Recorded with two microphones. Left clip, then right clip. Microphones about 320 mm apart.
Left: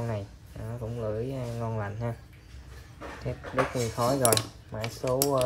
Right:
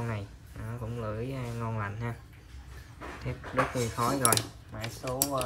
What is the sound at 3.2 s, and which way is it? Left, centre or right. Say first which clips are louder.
Speech: left 1 dB; centre.